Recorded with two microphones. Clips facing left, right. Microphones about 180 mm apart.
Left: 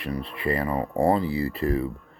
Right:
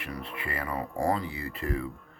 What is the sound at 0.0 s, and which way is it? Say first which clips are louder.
Speech: left 8 dB; 35° left (ahead or behind).